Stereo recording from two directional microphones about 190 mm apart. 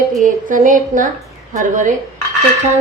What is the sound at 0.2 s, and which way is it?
A woman's voice, 45° right (ahead or behind).